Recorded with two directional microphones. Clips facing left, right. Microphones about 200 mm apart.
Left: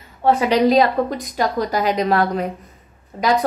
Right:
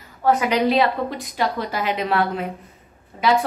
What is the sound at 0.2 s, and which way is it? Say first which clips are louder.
A woman's voice: left 3 dB; 30° left (ahead or behind).